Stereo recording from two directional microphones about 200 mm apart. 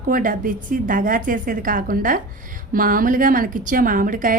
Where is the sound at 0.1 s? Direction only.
40° right (ahead or behind).